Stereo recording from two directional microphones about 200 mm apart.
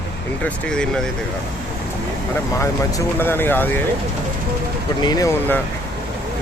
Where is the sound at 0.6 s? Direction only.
5° left (ahead or behind).